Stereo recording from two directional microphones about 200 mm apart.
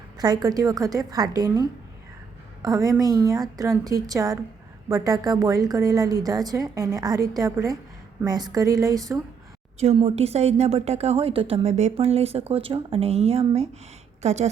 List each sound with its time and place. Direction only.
0.2 s a woman's voice: 20° right (ahead or behind)
9.8 s a woman's voice: 30° right (ahead or behind)